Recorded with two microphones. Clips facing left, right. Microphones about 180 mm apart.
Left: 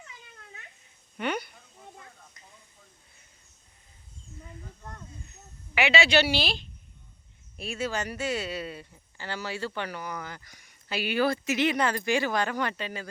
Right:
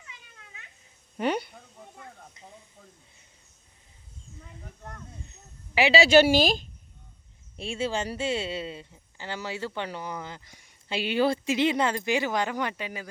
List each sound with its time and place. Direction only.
1.1 s a sound: 30° right (ahead or behind)
5.3 s speech: 30° right (ahead or behind)
7.5 s speech: 25° right (ahead or behind)